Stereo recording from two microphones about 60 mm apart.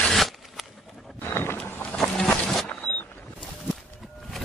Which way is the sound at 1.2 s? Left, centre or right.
Left.